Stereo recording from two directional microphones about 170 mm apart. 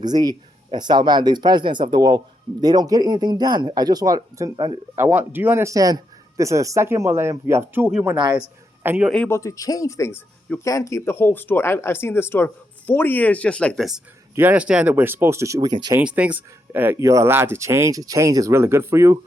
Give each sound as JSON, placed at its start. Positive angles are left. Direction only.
{"t": 0.0, "sound": "speech", "side_deg": -25}
{"t": 4.9, "sound": "speech", "side_deg": -10}
{"t": 9.0, "sound": "speech", "side_deg": 5}
{"t": 16.0, "sound": "speech", "side_deg": -10}